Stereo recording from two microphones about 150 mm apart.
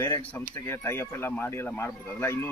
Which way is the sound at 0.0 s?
10° left (ahead or behind).